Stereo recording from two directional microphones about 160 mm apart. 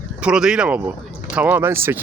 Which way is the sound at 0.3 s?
5° right (ahead or behind).